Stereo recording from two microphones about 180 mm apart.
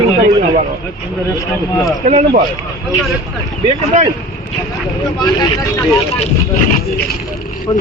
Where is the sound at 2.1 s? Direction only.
40° right (ahead or behind).